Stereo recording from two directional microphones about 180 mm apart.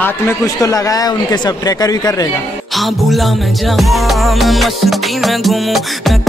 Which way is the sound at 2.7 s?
Centre (ahead or behind).